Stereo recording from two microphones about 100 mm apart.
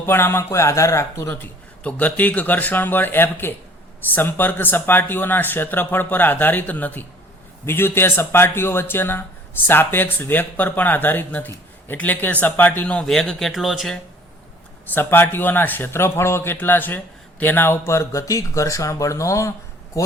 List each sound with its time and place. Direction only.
0.0 s speech: 20° left (ahead or behind)
1.3 s speech: 15° left (ahead or behind); by 13.9 s centre (ahead or behind)
14.9 s speech: 20° left (ahead or behind)